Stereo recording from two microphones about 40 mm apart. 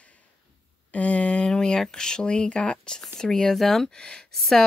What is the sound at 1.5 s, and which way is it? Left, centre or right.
Speech, centre.